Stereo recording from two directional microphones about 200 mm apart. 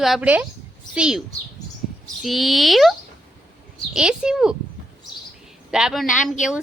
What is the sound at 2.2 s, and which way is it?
Speech, centre (ahead or behind).